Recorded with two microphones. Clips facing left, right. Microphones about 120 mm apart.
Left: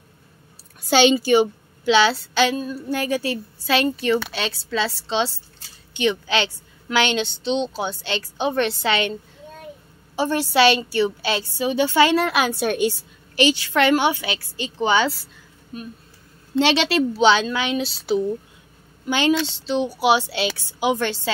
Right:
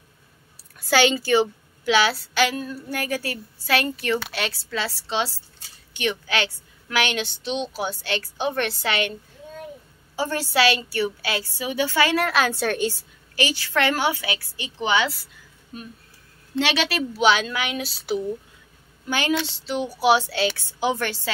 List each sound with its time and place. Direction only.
0.8 s a woman's voice: 20° left (ahead or behind)
16.5 s a woman's voice: 30° left (ahead or behind)